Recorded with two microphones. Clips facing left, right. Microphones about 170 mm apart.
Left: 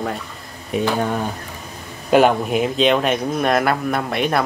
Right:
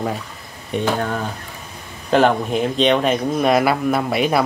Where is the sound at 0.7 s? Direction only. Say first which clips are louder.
Left 1 dB; 15° left (ahead or behind).